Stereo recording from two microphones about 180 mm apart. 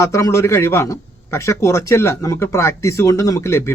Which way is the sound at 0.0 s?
15° left (ahead or behind).